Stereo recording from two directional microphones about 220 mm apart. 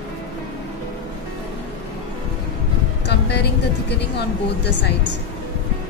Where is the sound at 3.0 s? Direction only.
50° left (ahead or behind).